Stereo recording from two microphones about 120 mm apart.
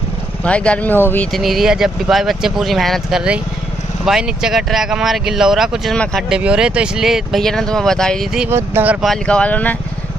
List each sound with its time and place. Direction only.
0.4 s speech: 10° left (ahead or behind)
1.3 s speech: centre (ahead or behind)
8.5 s speech: 20° right (ahead or behind)
9.0 s speech: 5° left (ahead or behind)